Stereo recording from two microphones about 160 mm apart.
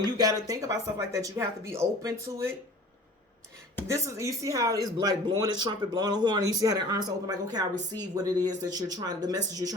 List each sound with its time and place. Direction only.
0.0 s speech: 25° right (ahead or behind)
3.8 s speech: 20° right (ahead or behind)